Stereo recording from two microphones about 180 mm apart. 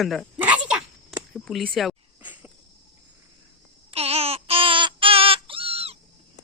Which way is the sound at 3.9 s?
35° right (ahead or behind).